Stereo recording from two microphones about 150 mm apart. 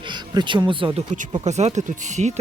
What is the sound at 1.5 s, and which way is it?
Speech, 50° right (ahead or behind).